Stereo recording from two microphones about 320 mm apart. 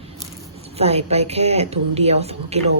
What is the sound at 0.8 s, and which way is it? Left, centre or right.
Speech, centre.